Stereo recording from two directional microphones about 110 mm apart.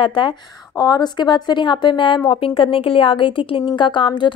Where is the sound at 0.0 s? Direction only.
45° left (ahead or behind).